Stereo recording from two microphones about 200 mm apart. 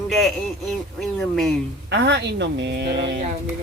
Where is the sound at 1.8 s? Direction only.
60° right (ahead or behind).